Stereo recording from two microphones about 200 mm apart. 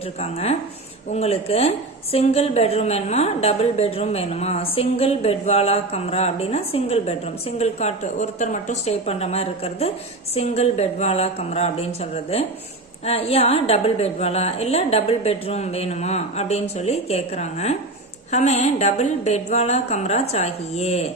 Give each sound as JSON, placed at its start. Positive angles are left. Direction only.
{"t": 0.2, "sound": "a woman's voice", "side_deg": 30}